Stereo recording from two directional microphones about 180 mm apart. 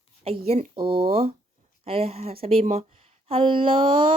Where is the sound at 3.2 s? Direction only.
30° right (ahead or behind).